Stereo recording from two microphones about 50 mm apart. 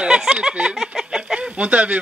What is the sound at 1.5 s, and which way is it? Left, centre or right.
Speech, right.